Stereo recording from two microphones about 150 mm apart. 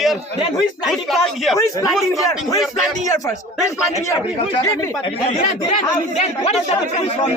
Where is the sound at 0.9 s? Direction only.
Centre (ahead or behind).